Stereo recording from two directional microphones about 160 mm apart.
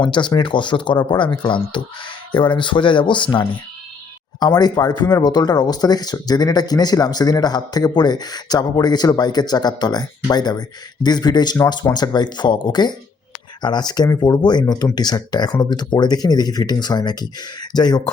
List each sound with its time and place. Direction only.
0.0 s speech: 30° left (ahead or behind)